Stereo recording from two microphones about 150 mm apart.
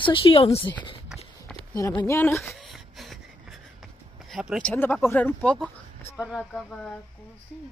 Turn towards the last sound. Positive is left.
turn(degrees=10)  # may be behind; listen again after turning